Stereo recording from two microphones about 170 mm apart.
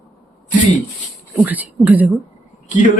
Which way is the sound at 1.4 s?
10° right (ahead or behind).